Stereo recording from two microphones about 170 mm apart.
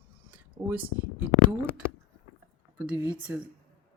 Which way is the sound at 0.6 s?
25° right (ahead or behind).